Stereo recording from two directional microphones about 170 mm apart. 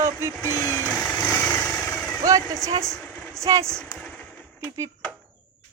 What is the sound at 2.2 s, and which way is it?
Speech, 20° right (ahead or behind).